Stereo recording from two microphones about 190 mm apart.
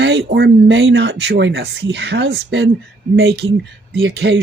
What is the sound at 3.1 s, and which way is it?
Speech, 60° right (ahead or behind).